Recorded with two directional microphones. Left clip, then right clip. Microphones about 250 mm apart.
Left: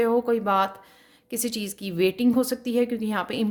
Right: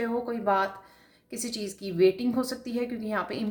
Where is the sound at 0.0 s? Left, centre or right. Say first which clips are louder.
Left 7 dB; left.